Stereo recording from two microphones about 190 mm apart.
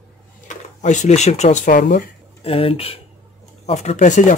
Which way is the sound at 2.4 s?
30° left (ahead or behind).